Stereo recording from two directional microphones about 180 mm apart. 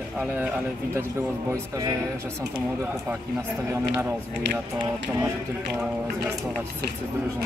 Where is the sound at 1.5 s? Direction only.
20° right (ahead or behind).